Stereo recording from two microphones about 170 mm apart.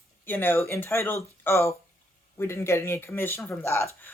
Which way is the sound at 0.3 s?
10° left (ahead or behind).